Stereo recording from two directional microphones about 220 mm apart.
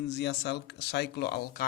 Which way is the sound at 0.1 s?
50° left (ahead or behind).